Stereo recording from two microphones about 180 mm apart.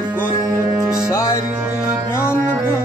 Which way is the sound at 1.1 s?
15° left (ahead or behind).